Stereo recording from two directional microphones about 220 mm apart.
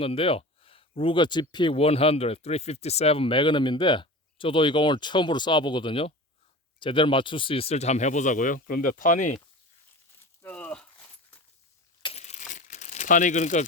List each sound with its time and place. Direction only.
0.0 s speech: 25° left (ahead or behind)
10.4 s a sound: 5° left (ahead or behind)
12.0 s crumpling: 30° left (ahead or behind)